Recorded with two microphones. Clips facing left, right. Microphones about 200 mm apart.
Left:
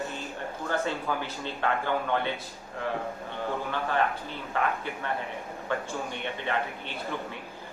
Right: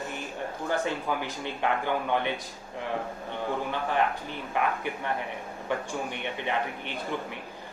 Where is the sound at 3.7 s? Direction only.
15° right (ahead or behind).